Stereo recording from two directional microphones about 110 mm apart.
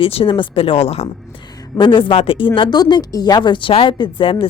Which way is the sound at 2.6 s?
40° left (ahead or behind).